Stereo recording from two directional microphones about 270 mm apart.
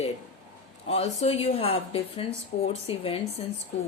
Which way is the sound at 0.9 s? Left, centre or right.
Left.